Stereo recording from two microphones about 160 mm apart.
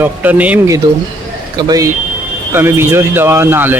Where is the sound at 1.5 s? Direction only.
25° right (ahead or behind).